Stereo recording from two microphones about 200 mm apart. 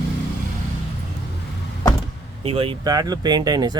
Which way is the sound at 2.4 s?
25° right (ahead or behind).